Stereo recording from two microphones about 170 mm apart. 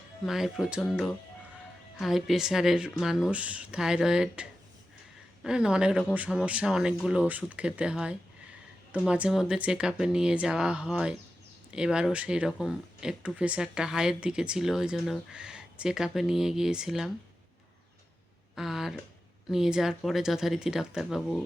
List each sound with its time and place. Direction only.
0.3 s speech: centre (ahead or behind)
18.5 s a sound: centre (ahead or behind)
19.5 s speech: centre (ahead or behind)